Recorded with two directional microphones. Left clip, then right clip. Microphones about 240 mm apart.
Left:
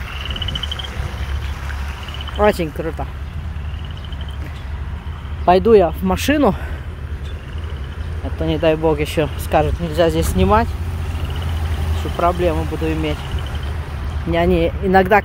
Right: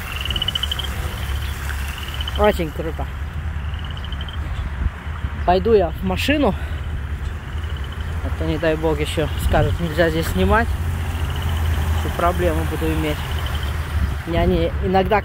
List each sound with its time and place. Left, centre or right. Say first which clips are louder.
2.3 s speech: left 2 dB; centre
5.4 s speech: left 4 dB; left
8.5 s speech: left 4 dB; centre
12.2 s speech: left 3 dB; centre
14.3 s speech: left 4 dB; centre